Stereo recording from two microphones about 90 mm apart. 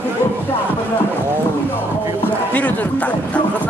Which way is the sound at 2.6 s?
20° left (ahead or behind).